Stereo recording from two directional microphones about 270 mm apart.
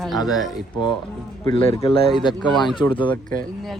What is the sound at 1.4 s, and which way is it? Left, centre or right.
A man's voice, centre.